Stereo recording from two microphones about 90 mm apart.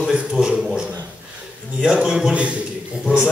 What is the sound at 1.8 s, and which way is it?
Speech, 10° right (ahead or behind).